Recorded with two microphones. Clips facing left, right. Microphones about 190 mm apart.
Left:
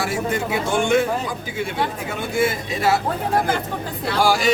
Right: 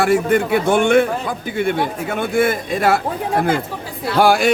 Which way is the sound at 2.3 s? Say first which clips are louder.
Right 3 dB; 55° right (ahead or behind).